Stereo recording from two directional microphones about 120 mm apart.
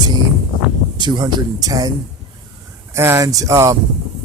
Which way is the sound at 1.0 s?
40° right (ahead or behind).